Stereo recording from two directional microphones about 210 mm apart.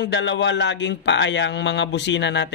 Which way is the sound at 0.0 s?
55° left (ahead or behind).